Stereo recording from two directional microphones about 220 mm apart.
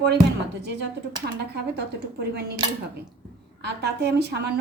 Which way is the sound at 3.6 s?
45° right (ahead or behind).